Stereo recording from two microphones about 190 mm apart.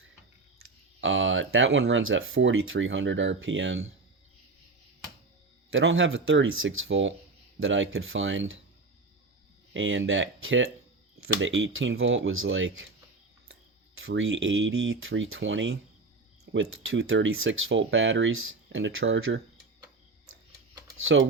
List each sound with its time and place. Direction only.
1.0 s speech: 85° right
5.7 s speech: 90° right
9.7 s speech: 90° right